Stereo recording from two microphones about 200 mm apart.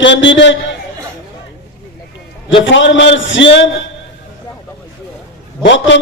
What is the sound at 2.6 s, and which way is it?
Speech, 65° left (ahead or behind).